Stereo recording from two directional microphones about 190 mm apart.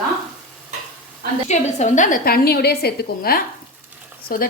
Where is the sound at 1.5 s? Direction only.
35° left (ahead or behind).